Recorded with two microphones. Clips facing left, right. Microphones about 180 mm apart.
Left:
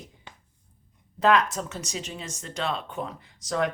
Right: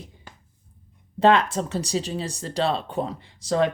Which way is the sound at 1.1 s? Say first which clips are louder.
Right 3 dB; 30° right (ahead or behind).